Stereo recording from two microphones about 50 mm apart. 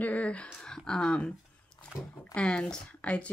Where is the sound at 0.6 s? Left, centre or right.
Centre.